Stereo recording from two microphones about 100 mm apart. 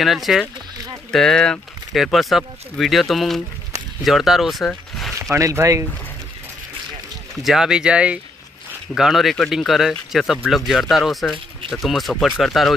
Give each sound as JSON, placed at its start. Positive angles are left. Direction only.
{"t": 0.0, "sound": "speech", "side_deg": 0}
{"t": 4.6, "sound": "a sound", "side_deg": 0}
{"t": 5.2, "sound": "speech", "side_deg": -30}
{"t": 7.4, "sound": "speech", "side_deg": -5}